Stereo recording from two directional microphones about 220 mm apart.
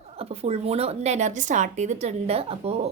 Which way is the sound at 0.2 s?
30° right (ahead or behind).